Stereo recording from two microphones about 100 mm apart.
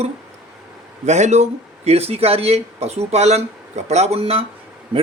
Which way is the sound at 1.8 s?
90° right.